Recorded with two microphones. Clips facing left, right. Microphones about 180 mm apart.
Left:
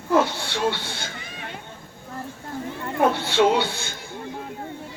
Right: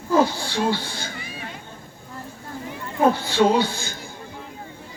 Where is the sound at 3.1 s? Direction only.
70° left (ahead or behind).